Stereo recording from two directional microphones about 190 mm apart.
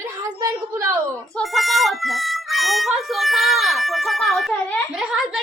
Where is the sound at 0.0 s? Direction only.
15° right (ahead or behind).